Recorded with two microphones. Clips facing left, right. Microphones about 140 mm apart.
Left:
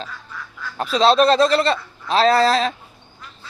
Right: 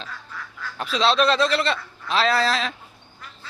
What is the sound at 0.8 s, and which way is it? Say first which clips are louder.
A man's voice: left 5 dB; 40° left (ahead or behind).